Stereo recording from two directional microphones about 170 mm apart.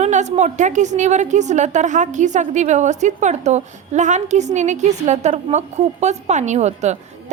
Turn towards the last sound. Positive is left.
turn(degrees=-40)  # may be behind; listen again after turning